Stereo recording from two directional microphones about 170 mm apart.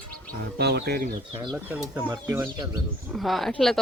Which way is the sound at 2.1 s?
20° right (ahead or behind).